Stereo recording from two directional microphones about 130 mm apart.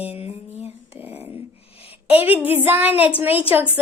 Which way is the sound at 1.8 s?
50° left (ahead or behind).